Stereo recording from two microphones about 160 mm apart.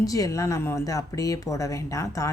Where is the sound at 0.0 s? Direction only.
20° left (ahead or behind).